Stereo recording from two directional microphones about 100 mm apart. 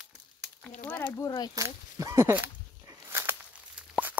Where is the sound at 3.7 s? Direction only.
10° right (ahead or behind).